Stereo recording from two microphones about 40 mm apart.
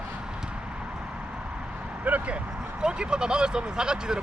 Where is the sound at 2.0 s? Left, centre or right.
Right.